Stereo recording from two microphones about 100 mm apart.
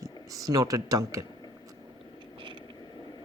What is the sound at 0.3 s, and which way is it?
Speech, 35° right (ahead or behind).